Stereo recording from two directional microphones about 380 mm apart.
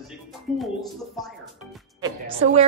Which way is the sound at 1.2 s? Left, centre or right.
Centre.